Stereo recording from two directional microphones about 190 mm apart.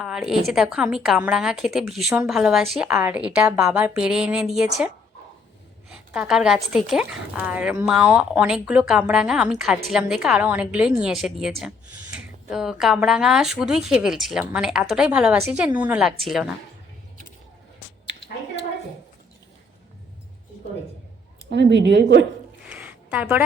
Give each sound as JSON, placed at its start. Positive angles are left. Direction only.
{"t": 0.0, "sound": "a woman's voice", "side_deg": -5}
{"t": 5.9, "sound": "a woman's voice", "side_deg": -5}
{"t": 21.5, "sound": "a woman's voice", "side_deg": -65}
{"t": 22.6, "sound": "a sound", "side_deg": -10}